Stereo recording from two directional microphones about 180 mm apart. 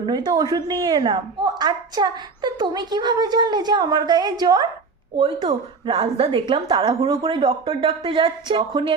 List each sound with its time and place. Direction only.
0.0 s speech: 25° right (ahead or behind)